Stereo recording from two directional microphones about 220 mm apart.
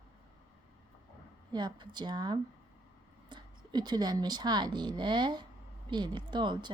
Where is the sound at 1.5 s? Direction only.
20° right (ahead or behind).